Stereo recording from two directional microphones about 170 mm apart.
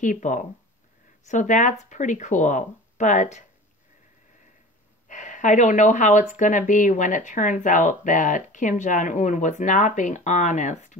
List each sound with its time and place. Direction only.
0.0 s speech: 50° left (ahead or behind)
5.0 s speech: 45° left (ahead or behind)